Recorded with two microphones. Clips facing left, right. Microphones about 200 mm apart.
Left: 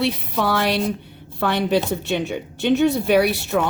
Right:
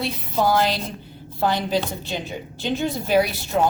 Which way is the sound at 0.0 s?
70° left (ahead or behind).